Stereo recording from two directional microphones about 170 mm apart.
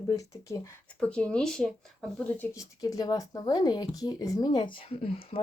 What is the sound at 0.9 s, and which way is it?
Speech, 5° left (ahead or behind).